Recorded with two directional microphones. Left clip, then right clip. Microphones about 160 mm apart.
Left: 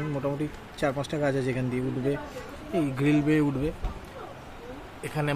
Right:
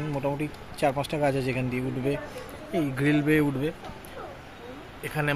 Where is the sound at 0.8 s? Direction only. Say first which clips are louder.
Right 2 dB; 10° left (ahead or behind).